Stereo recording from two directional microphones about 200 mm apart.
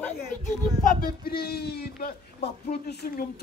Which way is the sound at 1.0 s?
50° left (ahead or behind).